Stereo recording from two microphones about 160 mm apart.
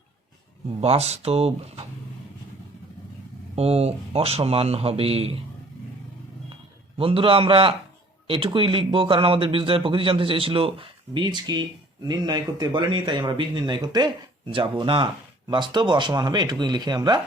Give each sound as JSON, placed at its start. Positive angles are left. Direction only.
{"t": 0.8, "sound": "speech", "side_deg": -40}
{"t": 3.5, "sound": "speech", "side_deg": -40}
{"t": 6.9, "sound": "speech", "side_deg": -35}